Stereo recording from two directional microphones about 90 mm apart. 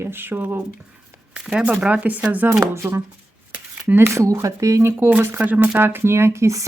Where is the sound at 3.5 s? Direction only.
20° right (ahead or behind).